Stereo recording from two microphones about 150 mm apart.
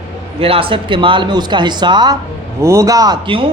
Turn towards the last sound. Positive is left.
turn(degrees=-35)  # may be behind; listen again after turning